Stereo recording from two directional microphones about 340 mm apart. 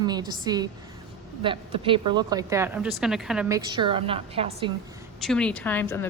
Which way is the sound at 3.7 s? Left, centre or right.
Centre.